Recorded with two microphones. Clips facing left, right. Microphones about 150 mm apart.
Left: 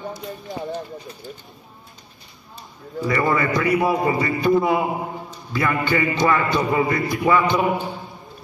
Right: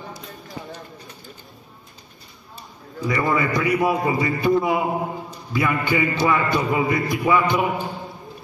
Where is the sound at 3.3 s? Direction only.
15° right (ahead or behind).